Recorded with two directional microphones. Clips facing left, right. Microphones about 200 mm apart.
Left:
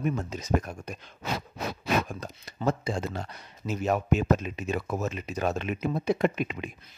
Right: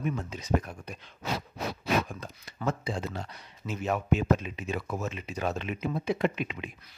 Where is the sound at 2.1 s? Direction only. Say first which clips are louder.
Left 3 dB; 40° left (ahead or behind).